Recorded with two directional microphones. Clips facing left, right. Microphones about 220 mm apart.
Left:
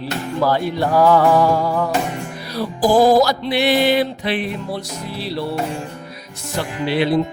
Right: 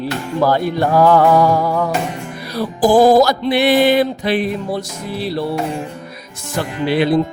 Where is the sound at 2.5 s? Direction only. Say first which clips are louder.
Right 3 dB; 50° right (ahead or behind).